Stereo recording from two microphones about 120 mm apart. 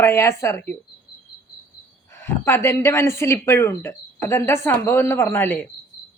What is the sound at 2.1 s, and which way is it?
Speech, 20° left (ahead or behind).